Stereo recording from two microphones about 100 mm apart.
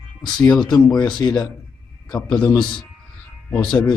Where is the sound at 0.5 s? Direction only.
45° left (ahead or behind).